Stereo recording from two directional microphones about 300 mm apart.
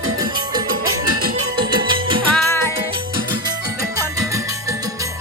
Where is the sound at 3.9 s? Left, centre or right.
Centre.